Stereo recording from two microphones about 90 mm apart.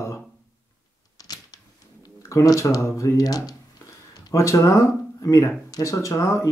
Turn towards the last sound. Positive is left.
turn(degrees=35)  # may be behind; listen again after turning